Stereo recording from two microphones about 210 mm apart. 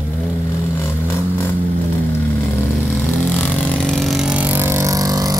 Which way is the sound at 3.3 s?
5° left (ahead or behind).